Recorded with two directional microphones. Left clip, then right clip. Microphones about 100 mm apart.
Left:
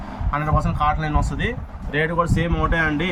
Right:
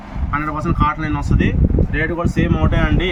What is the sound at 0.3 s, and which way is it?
Speech, 65° left (ahead or behind).